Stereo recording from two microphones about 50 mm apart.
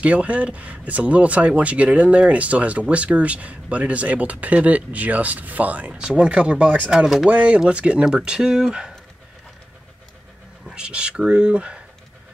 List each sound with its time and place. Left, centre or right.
0.0 s speech: right
5.9 s speech: centre
10.7 s speech: centre